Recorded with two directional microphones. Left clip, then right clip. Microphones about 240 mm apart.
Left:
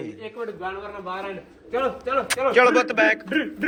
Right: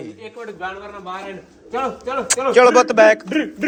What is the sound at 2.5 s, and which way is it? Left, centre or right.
Speech, right.